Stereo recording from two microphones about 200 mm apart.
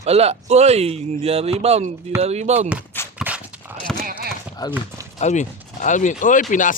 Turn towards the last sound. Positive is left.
turn(degrees=40)  # may be behind; listen again after turning